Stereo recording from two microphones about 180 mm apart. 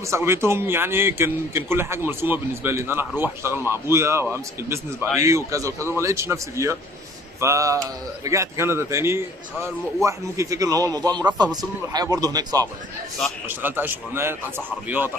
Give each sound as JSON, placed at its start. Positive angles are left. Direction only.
{"t": 0.1, "sound": "a man's voice", "side_deg": -15}
{"t": 13.5, "sound": "a man's voice", "side_deg": -10}